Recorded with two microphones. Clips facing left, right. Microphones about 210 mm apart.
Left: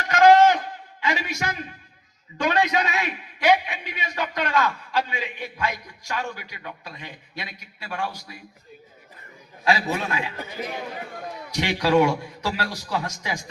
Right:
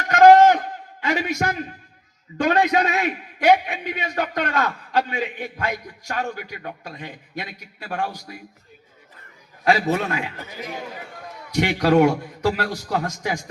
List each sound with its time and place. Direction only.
0.1 s a sound: 55° right (ahead or behind)
2.4 s a man's voice: 50° right (ahead or behind)
9.6 s a man's voice: 50° right (ahead or behind)
11.5 s a man's voice: 50° right (ahead or behind)